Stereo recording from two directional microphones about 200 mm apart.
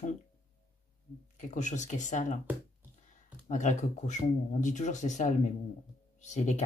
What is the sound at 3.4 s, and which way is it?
Speech, 40° left (ahead or behind).